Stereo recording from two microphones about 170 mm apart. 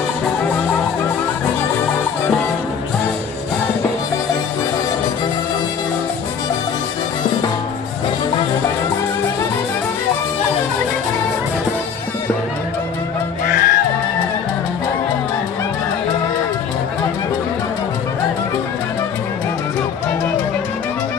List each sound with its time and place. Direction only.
13.5 s music: 50° left (ahead or behind)